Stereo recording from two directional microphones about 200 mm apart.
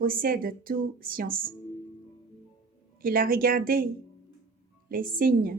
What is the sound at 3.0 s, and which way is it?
Speech, 45° right (ahead or behind).